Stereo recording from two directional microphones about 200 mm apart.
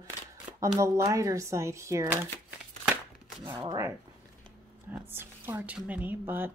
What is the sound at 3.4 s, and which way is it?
A woman's voice, 15° right (ahead or behind).